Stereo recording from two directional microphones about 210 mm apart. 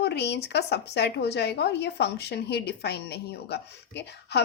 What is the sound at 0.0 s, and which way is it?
Speech, 55° left (ahead or behind).